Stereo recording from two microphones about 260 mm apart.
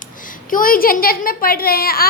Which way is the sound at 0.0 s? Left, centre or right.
Left.